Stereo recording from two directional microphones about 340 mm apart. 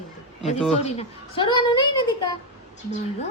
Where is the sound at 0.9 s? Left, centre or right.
Centre.